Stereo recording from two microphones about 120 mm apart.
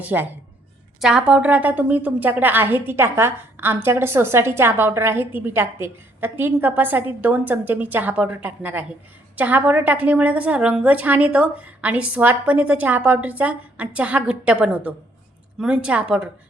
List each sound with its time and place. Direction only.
0.0 s a woman's voice: 15° right (ahead or behind)